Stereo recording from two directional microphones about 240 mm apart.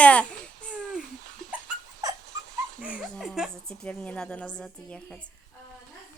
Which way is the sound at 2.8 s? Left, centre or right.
Centre.